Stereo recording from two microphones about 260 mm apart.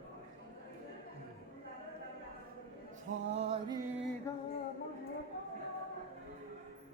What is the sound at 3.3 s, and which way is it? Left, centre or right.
Mantra, right.